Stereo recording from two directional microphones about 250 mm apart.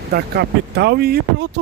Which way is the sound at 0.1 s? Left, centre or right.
Right.